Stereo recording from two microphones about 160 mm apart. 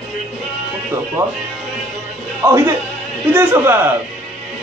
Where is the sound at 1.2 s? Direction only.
15° right (ahead or behind).